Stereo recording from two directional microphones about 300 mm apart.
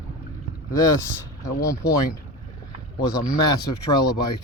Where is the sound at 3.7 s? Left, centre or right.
Left.